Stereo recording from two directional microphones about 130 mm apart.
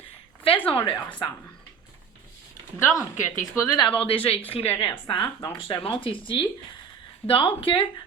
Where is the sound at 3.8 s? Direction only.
45° left (ahead or behind).